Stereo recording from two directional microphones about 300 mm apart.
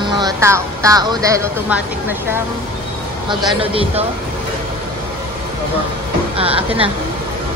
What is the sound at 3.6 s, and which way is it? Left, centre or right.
Speech, centre.